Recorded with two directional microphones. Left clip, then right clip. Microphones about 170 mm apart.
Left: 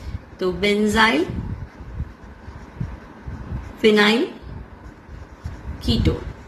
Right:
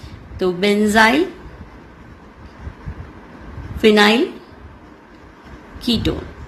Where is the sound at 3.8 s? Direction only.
40° right (ahead or behind).